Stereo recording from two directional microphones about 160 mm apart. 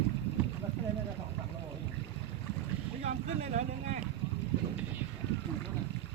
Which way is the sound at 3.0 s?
50° right (ahead or behind).